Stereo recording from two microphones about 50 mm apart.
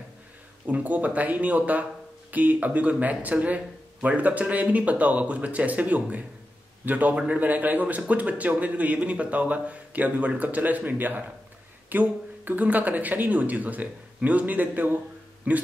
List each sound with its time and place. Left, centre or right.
0.7 s speech: right